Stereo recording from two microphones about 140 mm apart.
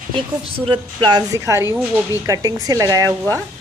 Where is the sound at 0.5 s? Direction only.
40° right (ahead or behind).